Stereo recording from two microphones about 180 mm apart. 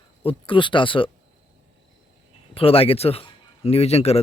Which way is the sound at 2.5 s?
30° left (ahead or behind).